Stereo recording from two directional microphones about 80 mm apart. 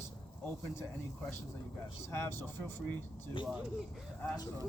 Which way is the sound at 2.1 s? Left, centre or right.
Left.